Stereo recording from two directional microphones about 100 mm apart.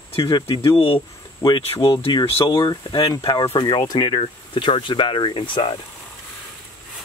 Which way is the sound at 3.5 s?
55° left (ahead or behind).